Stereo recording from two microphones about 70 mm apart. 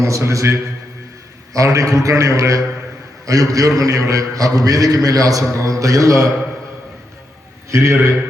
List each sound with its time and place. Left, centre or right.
0.0 s a man's voice: right
7.7 s a man's voice: right